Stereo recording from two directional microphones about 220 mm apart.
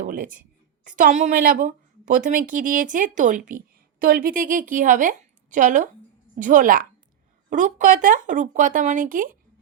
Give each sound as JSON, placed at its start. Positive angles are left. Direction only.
{"t": 0.0, "sound": "a woman's voice", "side_deg": -35}